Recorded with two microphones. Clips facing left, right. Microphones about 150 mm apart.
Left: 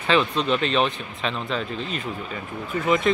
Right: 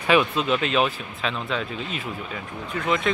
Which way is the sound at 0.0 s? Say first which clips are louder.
Right 1 dB; 10° right (ahead or behind).